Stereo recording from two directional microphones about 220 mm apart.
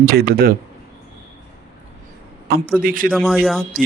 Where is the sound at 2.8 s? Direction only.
40° right (ahead or behind).